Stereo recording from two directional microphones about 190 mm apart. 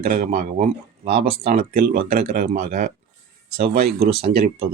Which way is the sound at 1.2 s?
30° right (ahead or behind).